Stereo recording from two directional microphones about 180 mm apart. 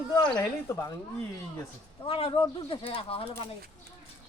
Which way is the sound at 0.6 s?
15° left (ahead or behind).